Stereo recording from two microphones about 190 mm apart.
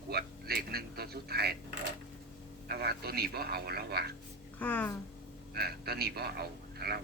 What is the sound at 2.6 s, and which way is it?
A man's voice, 55° right (ahead or behind).